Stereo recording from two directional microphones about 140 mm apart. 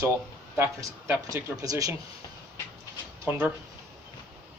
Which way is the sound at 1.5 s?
25° right (ahead or behind).